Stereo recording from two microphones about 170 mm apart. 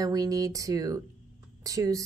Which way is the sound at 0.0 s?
20° right (ahead or behind).